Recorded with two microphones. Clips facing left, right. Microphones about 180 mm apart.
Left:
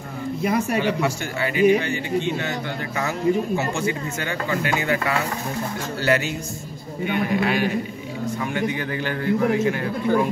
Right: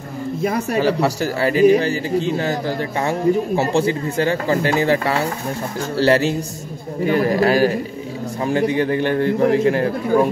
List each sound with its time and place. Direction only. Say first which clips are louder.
0.4 s speech: right 2 dB; 40° right (ahead or behind)